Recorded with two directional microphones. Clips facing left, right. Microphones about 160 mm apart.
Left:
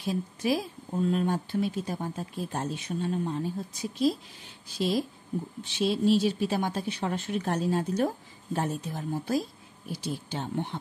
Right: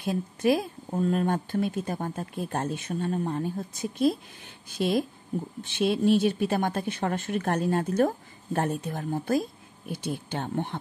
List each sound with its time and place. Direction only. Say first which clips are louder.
0.0 s speech: right 4 dB; 55° right (ahead or behind)